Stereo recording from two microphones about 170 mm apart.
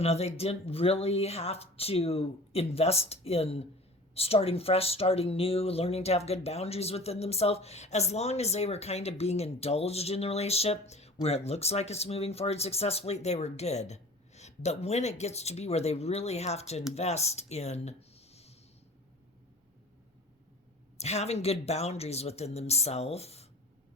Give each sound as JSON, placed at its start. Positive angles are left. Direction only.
{"t": 0.0, "sound": "speech", "side_deg": 40}
{"t": 21.0, "sound": "speech", "side_deg": 40}